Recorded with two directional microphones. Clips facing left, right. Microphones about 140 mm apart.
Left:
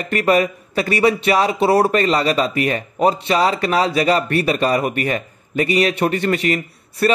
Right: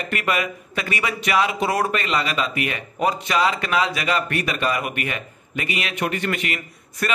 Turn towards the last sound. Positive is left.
turn(degrees=35)  # may be behind; listen again after turning